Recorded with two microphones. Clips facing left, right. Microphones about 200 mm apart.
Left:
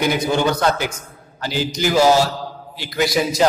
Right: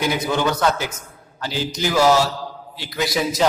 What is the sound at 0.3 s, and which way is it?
Speech, 30° left (ahead or behind).